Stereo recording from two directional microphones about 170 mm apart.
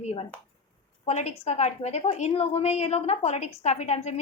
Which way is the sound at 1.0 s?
40° left (ahead or behind).